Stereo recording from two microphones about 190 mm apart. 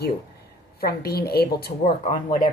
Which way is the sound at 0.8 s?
55° left (ahead or behind).